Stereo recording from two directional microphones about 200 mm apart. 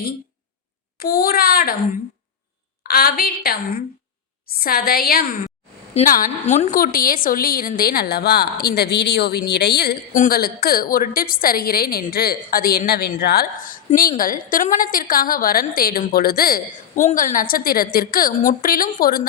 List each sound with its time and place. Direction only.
0.9 s a woman's voice: 50° left (ahead or behind)
2.8 s a woman's voice: 50° left (ahead or behind)
5.9 s a woman's voice: 30° left (ahead or behind)